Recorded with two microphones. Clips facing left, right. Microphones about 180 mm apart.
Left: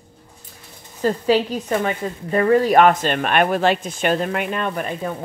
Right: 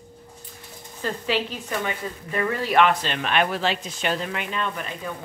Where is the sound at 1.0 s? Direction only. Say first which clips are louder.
Left 8 dB; 40° left (ahead or behind).